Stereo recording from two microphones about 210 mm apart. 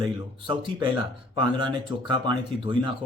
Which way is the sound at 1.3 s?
20° right (ahead or behind).